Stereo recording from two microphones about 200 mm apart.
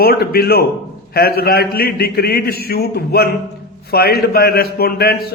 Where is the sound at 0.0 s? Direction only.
50° left (ahead or behind).